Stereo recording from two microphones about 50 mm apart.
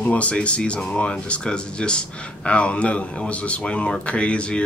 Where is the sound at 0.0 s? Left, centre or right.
Left.